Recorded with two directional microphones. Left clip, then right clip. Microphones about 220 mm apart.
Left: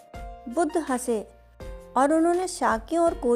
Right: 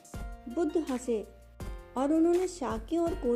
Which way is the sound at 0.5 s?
45° left (ahead or behind).